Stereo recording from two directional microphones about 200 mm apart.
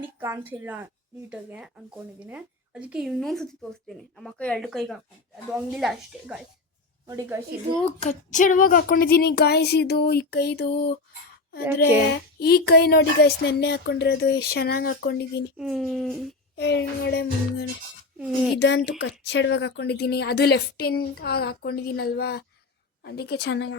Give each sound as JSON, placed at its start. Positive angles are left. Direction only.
{"t": 0.2, "sound": "a woman's voice", "side_deg": -10}
{"t": 8.0, "sound": "a woman's voice", "side_deg": 40}
{"t": 12.4, "sound": "speech", "side_deg": 55}
{"t": 15.5, "sound": "a woman's voice", "side_deg": 0}
{"t": 16.6, "sound": "speech", "side_deg": 60}
{"t": 18.2, "sound": "a woman's voice", "side_deg": 0}
{"t": 18.9, "sound": "a woman's voice", "side_deg": 60}